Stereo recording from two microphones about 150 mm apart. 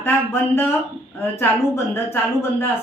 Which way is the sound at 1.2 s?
15° left (ahead or behind).